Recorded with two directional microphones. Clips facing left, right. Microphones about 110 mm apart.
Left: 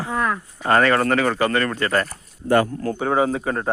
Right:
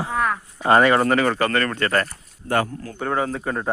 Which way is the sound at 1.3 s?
10° left (ahead or behind).